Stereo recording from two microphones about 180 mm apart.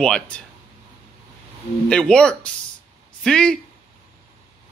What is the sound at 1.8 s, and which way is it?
Speech, 5° left (ahead or behind).